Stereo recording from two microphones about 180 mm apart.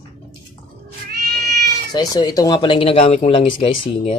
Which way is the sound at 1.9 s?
20° left (ahead or behind).